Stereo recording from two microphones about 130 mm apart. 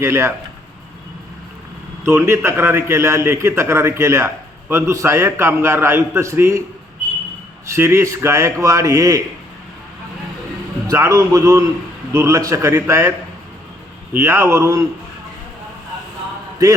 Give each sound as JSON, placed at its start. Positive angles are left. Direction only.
{"t": 0.0, "sound": "a man's voice", "side_deg": -20}
{"t": 2.0, "sound": "a man's voice", "side_deg": -20}
{"t": 7.8, "sound": "a man's voice", "side_deg": -20}
{"t": 10.8, "sound": "a man's voice", "side_deg": -25}